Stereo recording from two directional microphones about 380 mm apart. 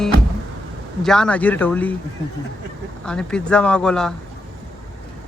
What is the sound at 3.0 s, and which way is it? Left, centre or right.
Speech, centre.